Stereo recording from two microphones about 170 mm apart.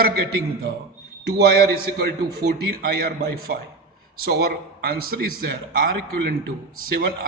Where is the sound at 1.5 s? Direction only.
65° right (ahead or behind).